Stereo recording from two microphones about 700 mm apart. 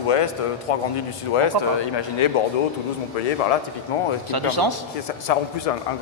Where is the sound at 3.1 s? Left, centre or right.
Left.